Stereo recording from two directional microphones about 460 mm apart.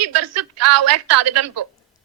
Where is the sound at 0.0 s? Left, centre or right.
Right.